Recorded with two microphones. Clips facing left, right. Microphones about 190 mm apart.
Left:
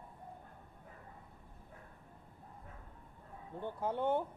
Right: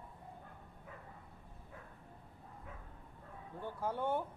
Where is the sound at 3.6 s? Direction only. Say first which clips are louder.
Left 2 dB; 20° left (ahead or behind).